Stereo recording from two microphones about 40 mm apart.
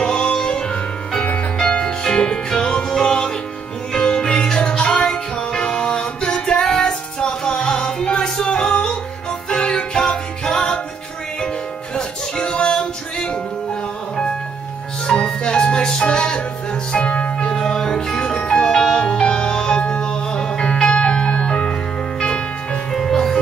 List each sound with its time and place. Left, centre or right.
0.0 s music: left
15.0 s music: centre
17.5 s music: centre
22.9 s music: centre